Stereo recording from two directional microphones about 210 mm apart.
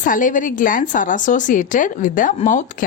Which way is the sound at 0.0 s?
40° left (ahead or behind).